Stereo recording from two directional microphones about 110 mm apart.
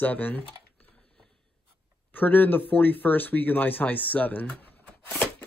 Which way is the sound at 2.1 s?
15° left (ahead or behind).